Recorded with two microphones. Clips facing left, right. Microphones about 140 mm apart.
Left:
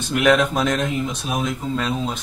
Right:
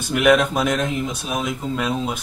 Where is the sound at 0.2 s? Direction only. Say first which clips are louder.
Right 1 dB; 5° right (ahead or behind).